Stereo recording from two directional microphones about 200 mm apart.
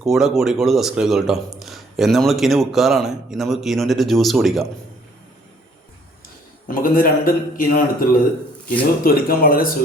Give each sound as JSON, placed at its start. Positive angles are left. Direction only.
{"t": 0.0, "sound": "speech", "side_deg": 0}
{"t": 6.7, "sound": "a man's voice", "side_deg": 45}
{"t": 9.0, "sound": "a man's voice", "side_deg": 45}